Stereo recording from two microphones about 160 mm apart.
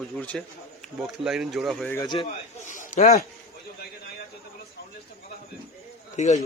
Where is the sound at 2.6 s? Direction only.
50° left (ahead or behind).